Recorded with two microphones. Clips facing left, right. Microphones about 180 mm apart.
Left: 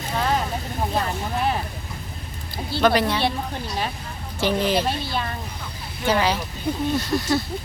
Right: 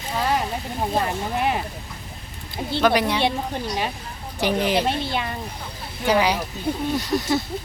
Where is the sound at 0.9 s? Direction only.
15° right (ahead or behind).